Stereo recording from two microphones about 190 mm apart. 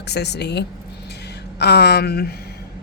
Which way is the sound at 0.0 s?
60° left (ahead or behind).